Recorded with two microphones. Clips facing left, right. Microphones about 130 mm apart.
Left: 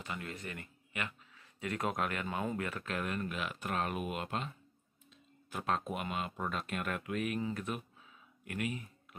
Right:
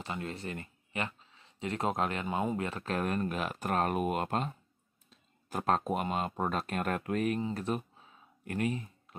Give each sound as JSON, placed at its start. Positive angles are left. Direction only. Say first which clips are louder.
{"t": 0.0, "sound": "speech", "louder": "right 4 dB", "side_deg": -30}
{"t": 7.3, "sound": "speech", "louder": "right 4 dB", "side_deg": -30}